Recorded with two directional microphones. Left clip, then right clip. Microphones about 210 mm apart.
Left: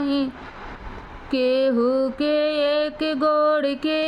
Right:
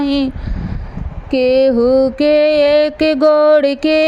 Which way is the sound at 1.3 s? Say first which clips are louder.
Right 8 dB; 20° right (ahead or behind).